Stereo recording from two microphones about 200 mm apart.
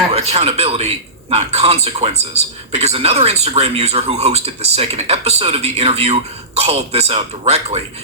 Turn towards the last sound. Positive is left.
turn(degrees=-30)  # may be behind; listen again after turning